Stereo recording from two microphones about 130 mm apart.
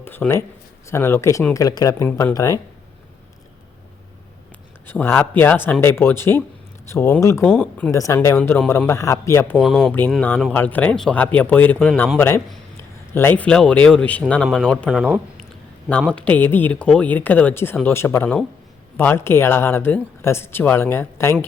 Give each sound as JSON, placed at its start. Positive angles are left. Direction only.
{"t": 0.0, "sound": "speech", "side_deg": 15}
{"t": 4.9, "sound": "speech", "side_deg": 15}
{"t": 9.6, "sound": "speech", "side_deg": 0}
{"t": 10.2, "sound": "speech", "side_deg": 15}
{"t": 14.8, "sound": "speech", "side_deg": -5}
{"t": 15.9, "sound": "speech", "side_deg": 10}